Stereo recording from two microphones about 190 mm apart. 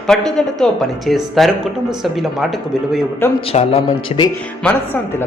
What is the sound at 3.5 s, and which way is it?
Speech, 30° left (ahead or behind).